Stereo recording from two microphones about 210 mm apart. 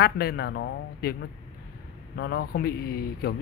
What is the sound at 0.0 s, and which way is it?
Speech, 50° left (ahead or behind).